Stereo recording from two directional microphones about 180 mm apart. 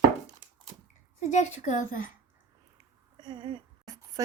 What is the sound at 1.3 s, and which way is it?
Speech, 45° left (ahead or behind).